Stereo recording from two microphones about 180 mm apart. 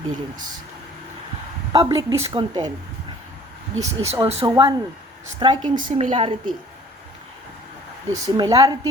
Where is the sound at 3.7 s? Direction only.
35° right (ahead or behind).